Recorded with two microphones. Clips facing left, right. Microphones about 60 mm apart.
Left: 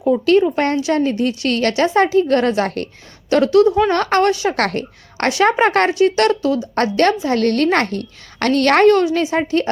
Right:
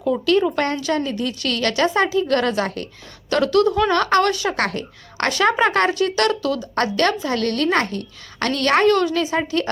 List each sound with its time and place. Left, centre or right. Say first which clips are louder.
0.1 s a woman's voice: left 4 dB; left
3.2 s speech: left 5 dB; left
3.7 s speech: left 3 dB; centre
3.9 s a woman's voice: left 2 dB; left
4.5 s a woman's voice: left 4 dB; left
5.4 s a woman's voice: left 3 dB; left
6.0 s a woman's voice: left 5 dB; left